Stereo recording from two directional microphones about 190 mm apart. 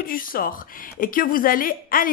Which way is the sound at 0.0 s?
50° left (ahead or behind).